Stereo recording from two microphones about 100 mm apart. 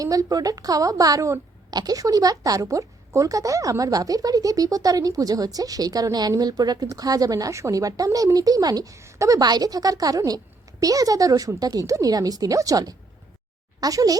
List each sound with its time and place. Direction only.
0.0 s a woman's voice: 35° right (ahead or behind)